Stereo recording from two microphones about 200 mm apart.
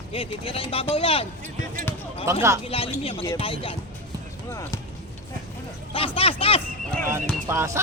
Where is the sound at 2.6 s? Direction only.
30° left (ahead or behind).